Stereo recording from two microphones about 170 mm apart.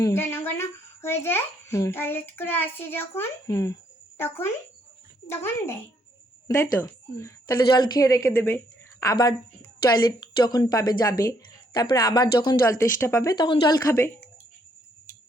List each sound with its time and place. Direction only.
0.0 s a child's voice: 15° left (ahead or behind)